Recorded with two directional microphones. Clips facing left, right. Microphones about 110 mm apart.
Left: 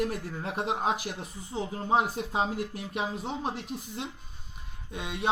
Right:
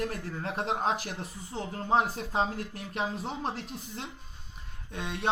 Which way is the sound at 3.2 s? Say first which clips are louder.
Left 1 dB; centre (ahead or behind).